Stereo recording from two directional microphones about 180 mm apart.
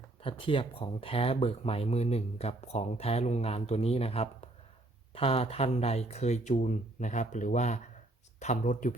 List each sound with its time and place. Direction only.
0.2 s speech: 30° left (ahead or behind)